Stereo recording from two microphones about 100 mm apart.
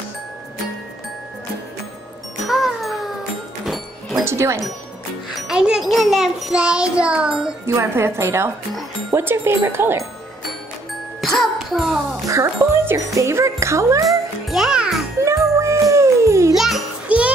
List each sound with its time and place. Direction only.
2.4 s music: centre (ahead or behind)
4.2 s speech: 25° right (ahead or behind)
5.5 s a child's voice: 5° right (ahead or behind)
7.6 s speech: 25° right (ahead or behind)
11.1 s music: centre (ahead or behind)
12.3 s speech: 30° right (ahead or behind)
14.5 s music: 5° right (ahead or behind)
15.5 s music: 30° right (ahead or behind)
16.5 s music: 5° right (ahead or behind)